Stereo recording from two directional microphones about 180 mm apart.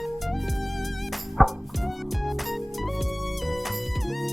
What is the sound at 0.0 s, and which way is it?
Music, centre (ahead or behind).